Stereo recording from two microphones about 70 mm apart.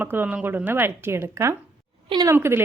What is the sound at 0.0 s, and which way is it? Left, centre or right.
Speech, right.